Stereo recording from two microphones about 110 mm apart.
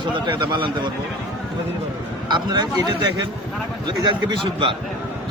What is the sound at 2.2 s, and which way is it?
Speech, 40° right (ahead or behind).